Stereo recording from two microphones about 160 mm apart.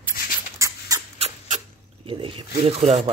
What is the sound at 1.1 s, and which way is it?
Rodents, 40° right (ahead or behind).